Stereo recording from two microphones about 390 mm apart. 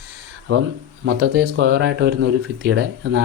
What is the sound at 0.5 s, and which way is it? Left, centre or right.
Speech, right.